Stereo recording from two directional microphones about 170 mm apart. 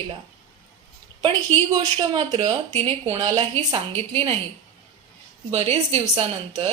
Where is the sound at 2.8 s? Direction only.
35° right (ahead or behind).